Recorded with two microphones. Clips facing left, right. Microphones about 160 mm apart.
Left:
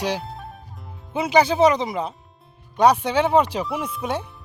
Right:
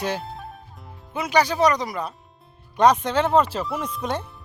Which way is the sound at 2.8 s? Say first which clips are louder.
Left 1 dB; 10° left (ahead or behind).